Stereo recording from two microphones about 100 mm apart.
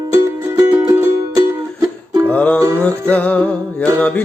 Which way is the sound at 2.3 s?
15° left (ahead or behind).